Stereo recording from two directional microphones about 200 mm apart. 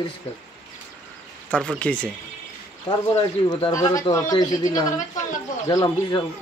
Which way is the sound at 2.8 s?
25° left (ahead or behind).